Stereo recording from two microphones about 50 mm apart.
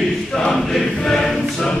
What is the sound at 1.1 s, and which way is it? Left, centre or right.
Choir, centre.